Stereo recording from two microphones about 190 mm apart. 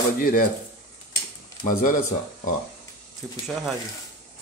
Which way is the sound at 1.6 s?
45° left (ahead or behind).